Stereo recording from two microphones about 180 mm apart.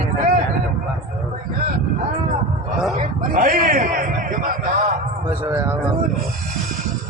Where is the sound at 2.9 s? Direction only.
45° right (ahead or behind).